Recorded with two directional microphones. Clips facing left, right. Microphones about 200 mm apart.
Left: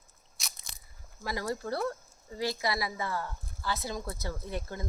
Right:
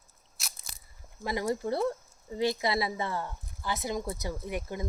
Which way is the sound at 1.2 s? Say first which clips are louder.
Right 4 dB; 20° right (ahead or behind).